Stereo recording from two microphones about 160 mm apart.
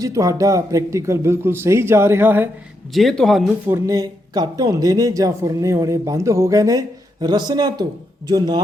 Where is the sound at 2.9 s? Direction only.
Centre (ahead or behind).